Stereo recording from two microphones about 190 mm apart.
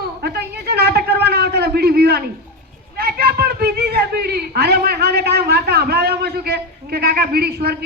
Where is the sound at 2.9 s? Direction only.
55° right (ahead or behind).